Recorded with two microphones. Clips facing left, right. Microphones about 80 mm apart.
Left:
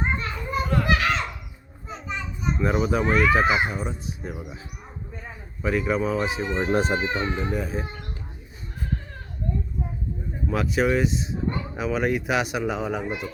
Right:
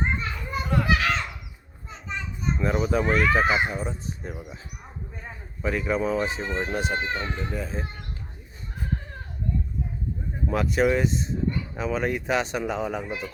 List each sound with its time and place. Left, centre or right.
0.0 s children playing: centre
1.9 s a child's voice: centre
5.6 s speech: centre
6.7 s speech: left
6.9 s speech: centre
10.5 s speech: centre